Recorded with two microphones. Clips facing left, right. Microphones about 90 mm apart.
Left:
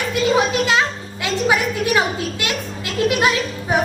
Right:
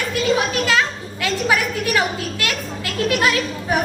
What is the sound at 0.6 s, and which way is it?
A child's voice, 25° left (ahead or behind).